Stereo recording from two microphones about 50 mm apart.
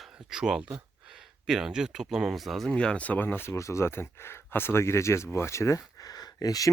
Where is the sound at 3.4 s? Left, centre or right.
Left.